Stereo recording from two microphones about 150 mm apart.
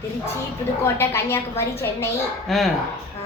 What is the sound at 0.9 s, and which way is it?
Speech, 15° left (ahead or behind).